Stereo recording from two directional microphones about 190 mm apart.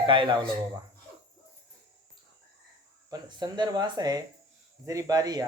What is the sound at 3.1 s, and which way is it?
Speech, 20° right (ahead or behind).